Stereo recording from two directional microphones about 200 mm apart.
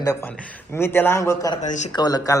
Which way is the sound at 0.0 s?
15° left (ahead or behind).